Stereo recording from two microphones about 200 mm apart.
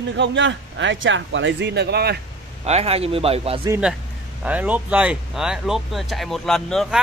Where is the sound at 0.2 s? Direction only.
65° right (ahead or behind).